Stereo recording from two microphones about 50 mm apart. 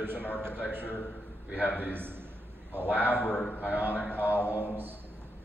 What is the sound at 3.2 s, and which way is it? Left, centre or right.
Speech, centre.